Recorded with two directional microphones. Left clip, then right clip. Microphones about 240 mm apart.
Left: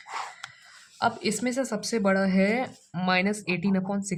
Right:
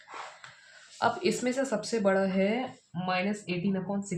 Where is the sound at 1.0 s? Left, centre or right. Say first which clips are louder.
Left 1 dB; left.